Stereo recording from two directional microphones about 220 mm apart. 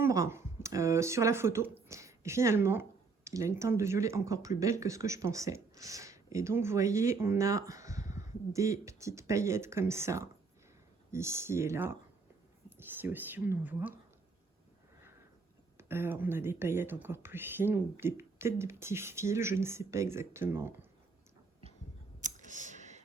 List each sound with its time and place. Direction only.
0.0 s speech: 10° right (ahead or behind)
15.8 s speech: 10° right (ahead or behind)
22.2 s clicking: 35° right (ahead or behind)